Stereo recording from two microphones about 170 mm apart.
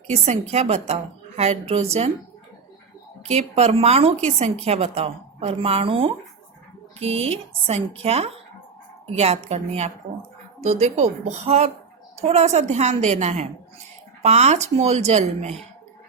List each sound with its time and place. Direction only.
0.5 s a woman's voice: 40° right (ahead or behind)
3.2 s a woman's voice: 40° right (ahead or behind)